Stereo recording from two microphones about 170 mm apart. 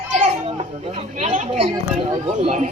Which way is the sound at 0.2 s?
40° right (ahead or behind).